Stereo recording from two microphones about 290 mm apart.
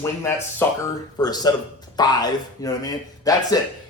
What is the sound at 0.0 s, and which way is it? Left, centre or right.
Speech, centre.